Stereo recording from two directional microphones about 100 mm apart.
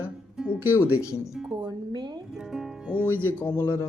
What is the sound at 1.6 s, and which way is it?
Speech, 45° right (ahead or behind).